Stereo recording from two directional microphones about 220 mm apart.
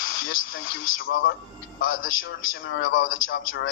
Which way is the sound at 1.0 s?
65° left (ahead or behind).